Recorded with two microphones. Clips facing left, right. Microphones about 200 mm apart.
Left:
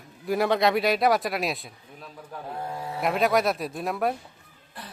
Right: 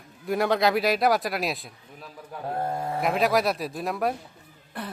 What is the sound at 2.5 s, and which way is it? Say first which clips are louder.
Speech: right 5 dB; 50° right (ahead or behind).